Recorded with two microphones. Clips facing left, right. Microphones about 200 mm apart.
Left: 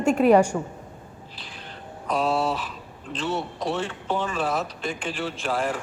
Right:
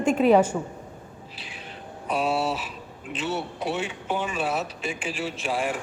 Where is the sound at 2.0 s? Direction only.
5° right (ahead or behind).